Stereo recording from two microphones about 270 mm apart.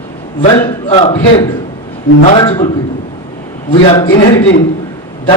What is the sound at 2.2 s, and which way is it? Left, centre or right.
Speech, centre.